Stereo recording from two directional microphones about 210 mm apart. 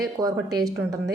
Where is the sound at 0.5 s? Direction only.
15° right (ahead or behind).